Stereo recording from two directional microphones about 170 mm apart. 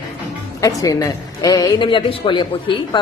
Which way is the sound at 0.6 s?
20° left (ahead or behind).